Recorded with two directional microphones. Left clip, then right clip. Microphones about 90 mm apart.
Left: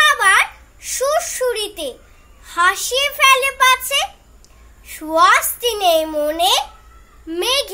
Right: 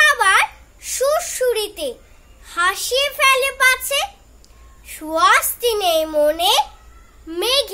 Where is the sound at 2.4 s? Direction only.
30° right (ahead or behind).